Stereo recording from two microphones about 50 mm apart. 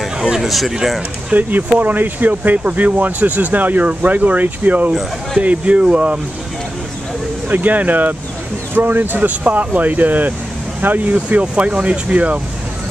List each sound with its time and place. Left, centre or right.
0.2 s speech: centre
1.3 s speech: right
7.4 s speech: right
11.1 s speech: right